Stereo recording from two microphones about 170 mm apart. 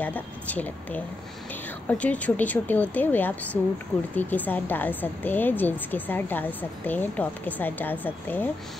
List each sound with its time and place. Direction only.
0.0 s a woman's voice: 10° left (ahead or behind)